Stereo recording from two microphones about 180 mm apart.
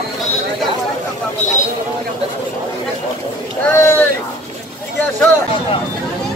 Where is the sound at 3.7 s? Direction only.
15° left (ahead or behind).